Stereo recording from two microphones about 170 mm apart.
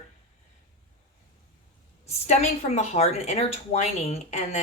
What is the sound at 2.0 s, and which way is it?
A woman's voice, 40° left (ahead or behind).